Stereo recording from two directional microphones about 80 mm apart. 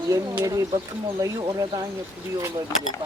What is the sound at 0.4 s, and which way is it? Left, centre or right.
Speech, right.